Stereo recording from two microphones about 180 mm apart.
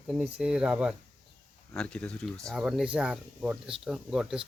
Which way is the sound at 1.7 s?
5° left (ahead or behind).